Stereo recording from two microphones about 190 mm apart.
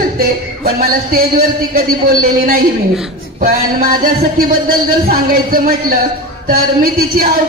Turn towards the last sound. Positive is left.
turn(degrees=-50)  # may be behind; listen again after turning